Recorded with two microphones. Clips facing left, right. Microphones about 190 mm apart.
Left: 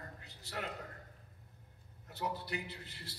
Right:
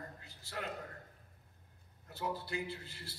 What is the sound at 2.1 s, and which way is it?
A man's voice, 20° left (ahead or behind).